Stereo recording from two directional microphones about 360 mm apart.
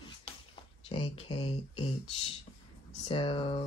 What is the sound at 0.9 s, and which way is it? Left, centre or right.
Speech, centre.